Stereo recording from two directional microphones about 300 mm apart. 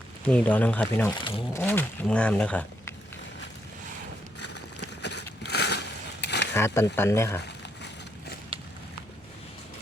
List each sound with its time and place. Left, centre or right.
0.3 s speech: centre
4.4 s run: left
5.0 s a sound: left
6.2 s mechanisms: left
6.5 s speech: centre